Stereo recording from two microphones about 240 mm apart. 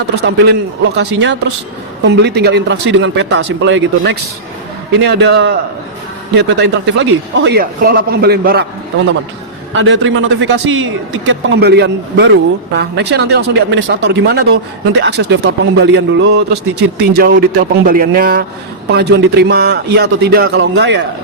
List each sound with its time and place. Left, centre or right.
0.2 s a man's voice: right
9.7 s a man's voice: right